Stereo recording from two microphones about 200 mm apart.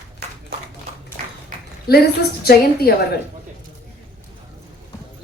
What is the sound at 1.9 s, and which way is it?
A woman's voice, 50° left (ahead or behind).